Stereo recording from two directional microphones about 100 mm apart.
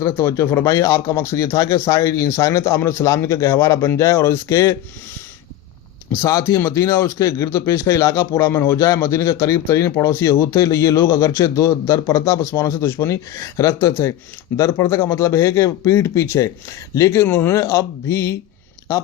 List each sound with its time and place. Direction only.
0.0 s speech: 25° left (ahead or behind)
6.1 s speech: 30° left (ahead or behind)